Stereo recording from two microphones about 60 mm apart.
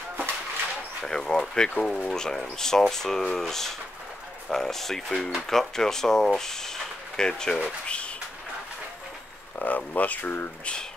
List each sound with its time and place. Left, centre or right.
1.0 s speech: centre
9.6 s speech: left